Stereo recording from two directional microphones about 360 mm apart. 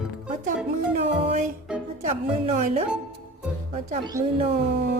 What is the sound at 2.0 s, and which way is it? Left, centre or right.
Speech, right.